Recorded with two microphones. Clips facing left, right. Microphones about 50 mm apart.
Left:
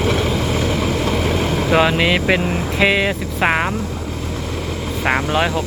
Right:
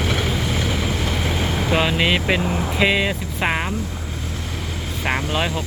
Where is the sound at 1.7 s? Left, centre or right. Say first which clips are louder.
Left 4 dB; left.